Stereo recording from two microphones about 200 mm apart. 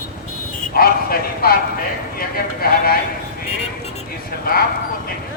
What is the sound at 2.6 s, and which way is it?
Speech, 50° left (ahead or behind).